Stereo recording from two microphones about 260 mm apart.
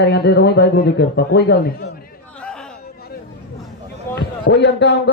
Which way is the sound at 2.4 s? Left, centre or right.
Centre.